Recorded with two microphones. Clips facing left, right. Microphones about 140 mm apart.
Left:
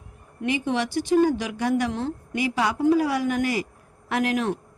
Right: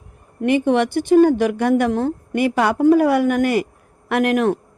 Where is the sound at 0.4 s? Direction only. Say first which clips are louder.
Right 8 dB; 55° right (ahead or behind).